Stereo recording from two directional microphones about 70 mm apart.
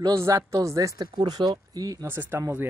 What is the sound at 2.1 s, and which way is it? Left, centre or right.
Speech, right.